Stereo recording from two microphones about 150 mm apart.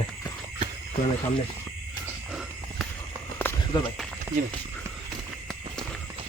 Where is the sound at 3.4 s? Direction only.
10° left (ahead or behind).